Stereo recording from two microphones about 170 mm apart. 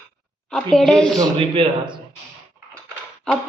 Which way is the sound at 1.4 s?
30° right (ahead or behind).